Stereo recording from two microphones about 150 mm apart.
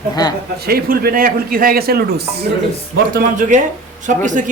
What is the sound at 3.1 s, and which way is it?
Speech, 65° right (ahead or behind).